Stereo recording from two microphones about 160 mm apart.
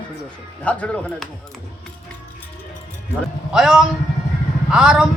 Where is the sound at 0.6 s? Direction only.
10° left (ahead or behind).